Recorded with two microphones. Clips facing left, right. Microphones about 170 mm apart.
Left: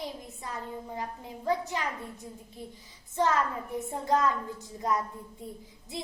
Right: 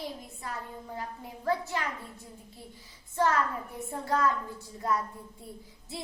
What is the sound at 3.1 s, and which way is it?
A woman's voice, 20° left (ahead or behind).